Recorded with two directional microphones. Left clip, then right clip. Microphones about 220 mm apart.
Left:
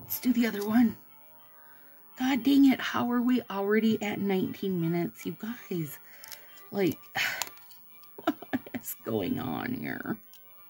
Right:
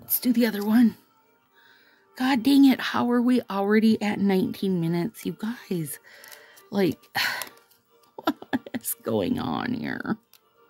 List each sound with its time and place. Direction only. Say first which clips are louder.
0.2 s speech: right 4 dB; 50° right (ahead or behind)
2.1 s speech: right 4 dB; 50° right (ahead or behind)
6.4 s music: right 4 dB; 50° right (ahead or behind)
8.2 s a sound: right 4 dB; 45° right (ahead or behind)